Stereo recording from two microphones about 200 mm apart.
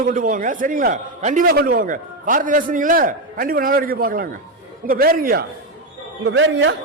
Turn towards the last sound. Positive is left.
turn(degrees=-65)  # may be behind; listen again after turning